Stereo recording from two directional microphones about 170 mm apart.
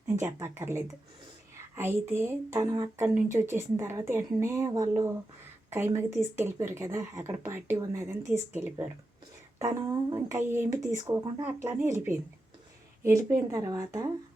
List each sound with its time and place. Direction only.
0.2 s speech: 15° right (ahead or behind)
9.6 s speech: 25° right (ahead or behind)
10.4 s speech: 15° right (ahead or behind)
11.1 s speech: 25° right (ahead or behind)
11.4 s speech: 10° right (ahead or behind)
13.0 s speech: 15° right (ahead or behind)